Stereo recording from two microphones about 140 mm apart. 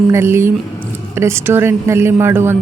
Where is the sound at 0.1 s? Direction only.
20° right (ahead or behind).